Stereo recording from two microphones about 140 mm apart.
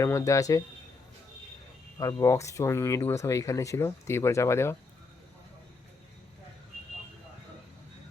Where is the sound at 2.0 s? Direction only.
25° left (ahead or behind).